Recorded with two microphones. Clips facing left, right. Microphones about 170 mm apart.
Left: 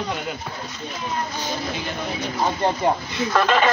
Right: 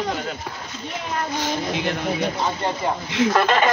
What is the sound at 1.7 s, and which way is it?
Speech, 75° right (ahead or behind).